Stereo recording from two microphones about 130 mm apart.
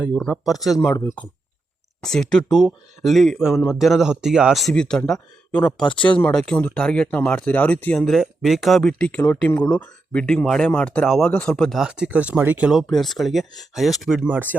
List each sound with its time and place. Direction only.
0.4 s speech: centre (ahead or behind)
0.9 s speech: 25° left (ahead or behind)
2.0 s speech: 5° left (ahead or behind)
8.0 s speech: centre (ahead or behind)
12.9 s speech: centre (ahead or behind)
14.3 s speech: 15° right (ahead or behind)